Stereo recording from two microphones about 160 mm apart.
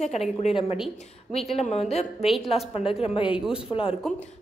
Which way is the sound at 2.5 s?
35° left (ahead or behind).